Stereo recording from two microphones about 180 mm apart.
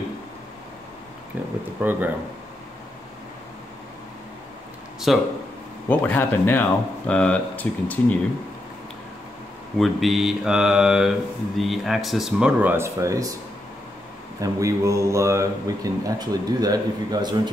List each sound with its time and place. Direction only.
1.8 s a man's voice: 10° right (ahead or behind)
5.1 s speech: centre (ahead or behind)
5.9 s speech: 10° left (ahead or behind)
9.8 s speech: centre (ahead or behind); by 13.3 s 15° right (ahead or behind)
14.4 s a man's voice: 15° right (ahead or behind)